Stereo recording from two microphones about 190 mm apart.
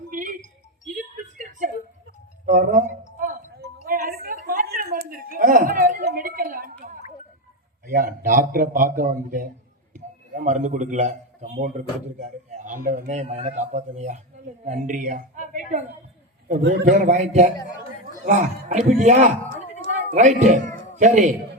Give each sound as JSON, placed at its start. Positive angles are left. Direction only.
{"t": 0.1, "sound": "music", "side_deg": -45}
{"t": 1.5, "sound": "a sound", "side_deg": -40}
{"t": 2.5, "sound": "a man's voice", "side_deg": -45}
{"t": 3.8, "sound": "music", "side_deg": -50}
{"t": 4.4, "sound": "a sound", "side_deg": -50}
{"t": 7.9, "sound": "a man's voice", "side_deg": -50}
{"t": 9.9, "sound": "a sound", "side_deg": -40}
{"t": 12.2, "sound": "a man's voice", "side_deg": -40}
{"t": 16.5, "sound": "a man's voice", "side_deg": -60}
{"t": 16.8, "sound": "a man's voice", "side_deg": -40}